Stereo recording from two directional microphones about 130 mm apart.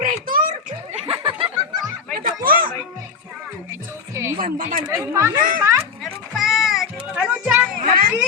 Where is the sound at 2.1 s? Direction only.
90° right.